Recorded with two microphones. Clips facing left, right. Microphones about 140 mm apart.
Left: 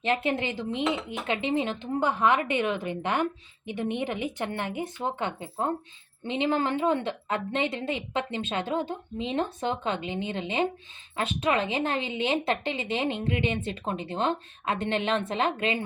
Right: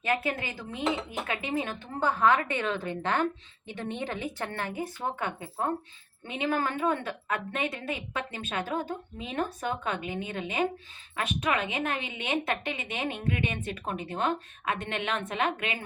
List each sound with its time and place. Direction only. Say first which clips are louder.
0.0 s speech: left 3 dB; 25° left (ahead or behind)